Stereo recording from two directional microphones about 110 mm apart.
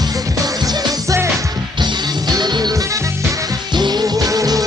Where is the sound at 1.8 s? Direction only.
40° right (ahead or behind).